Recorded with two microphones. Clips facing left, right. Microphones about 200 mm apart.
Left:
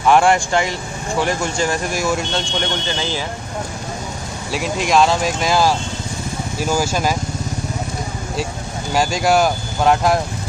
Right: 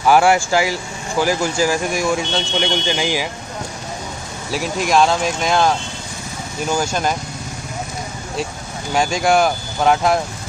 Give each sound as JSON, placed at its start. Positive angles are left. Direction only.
{"t": 0.0, "sound": "speech", "side_deg": -5}
{"t": 4.5, "sound": "speech", "side_deg": 0}
{"t": 8.9, "sound": "speech", "side_deg": 0}